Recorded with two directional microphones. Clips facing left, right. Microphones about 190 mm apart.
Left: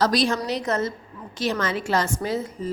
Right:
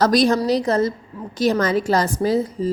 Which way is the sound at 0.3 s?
35° right (ahead or behind).